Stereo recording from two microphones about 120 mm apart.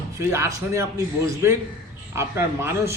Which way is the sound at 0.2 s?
20° right (ahead or behind).